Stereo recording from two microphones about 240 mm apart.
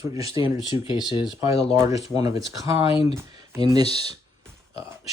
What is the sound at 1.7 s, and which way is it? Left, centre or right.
Speech, centre.